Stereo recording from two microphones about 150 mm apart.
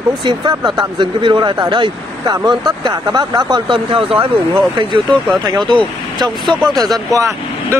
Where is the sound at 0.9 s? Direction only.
30° right (ahead or behind).